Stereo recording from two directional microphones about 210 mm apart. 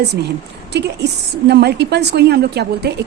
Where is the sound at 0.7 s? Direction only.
55° right (ahead or behind).